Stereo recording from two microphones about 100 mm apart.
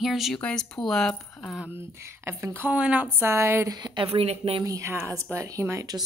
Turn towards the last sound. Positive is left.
turn(degrees=-35)  # may be behind; listen again after turning